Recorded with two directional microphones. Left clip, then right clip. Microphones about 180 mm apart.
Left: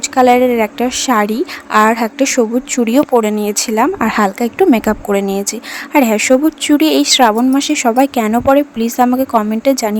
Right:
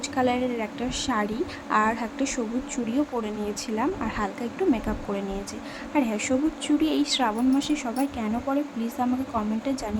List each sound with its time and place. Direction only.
0.2 s a woman's voice: 50° left (ahead or behind)